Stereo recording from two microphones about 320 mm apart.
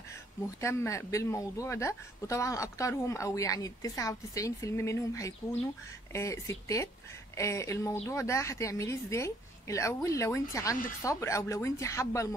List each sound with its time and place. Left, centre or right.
0.1 s speech: centre